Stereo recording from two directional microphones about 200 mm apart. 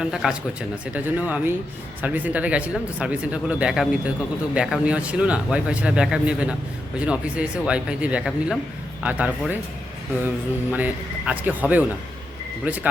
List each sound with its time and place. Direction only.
0.0 s speech: centre (ahead or behind)
10.7 s speech: 5° right (ahead or behind)